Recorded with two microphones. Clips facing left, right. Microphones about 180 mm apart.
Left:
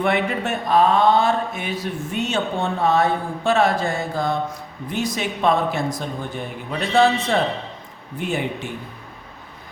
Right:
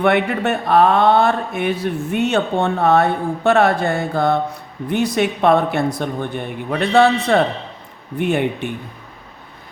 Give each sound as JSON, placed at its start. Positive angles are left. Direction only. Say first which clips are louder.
{"t": 0.0, "sound": "speech", "louder": "right 5 dB", "side_deg": -60}